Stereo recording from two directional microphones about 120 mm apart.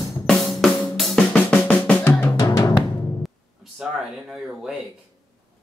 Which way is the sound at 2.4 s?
30° left (ahead or behind).